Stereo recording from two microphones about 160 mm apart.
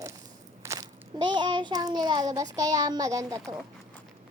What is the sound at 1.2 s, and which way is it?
Child singing, 30° right (ahead or behind).